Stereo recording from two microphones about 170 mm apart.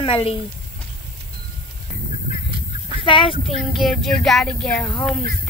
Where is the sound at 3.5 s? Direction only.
Centre (ahead or behind).